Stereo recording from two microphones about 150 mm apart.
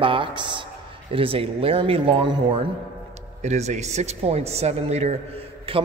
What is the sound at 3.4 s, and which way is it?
A man's voice, 50° right (ahead or behind).